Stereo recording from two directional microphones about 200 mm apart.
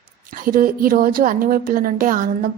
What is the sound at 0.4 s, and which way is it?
A woman's voice, 45° right (ahead or behind).